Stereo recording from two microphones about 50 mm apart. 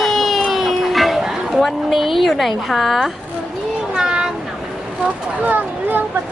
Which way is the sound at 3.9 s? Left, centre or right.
Centre.